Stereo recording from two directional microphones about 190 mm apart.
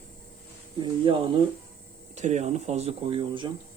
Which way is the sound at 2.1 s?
35° right (ahead or behind).